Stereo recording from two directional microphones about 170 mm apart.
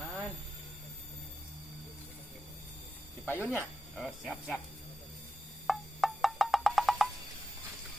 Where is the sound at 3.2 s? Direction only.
10° left (ahead or behind).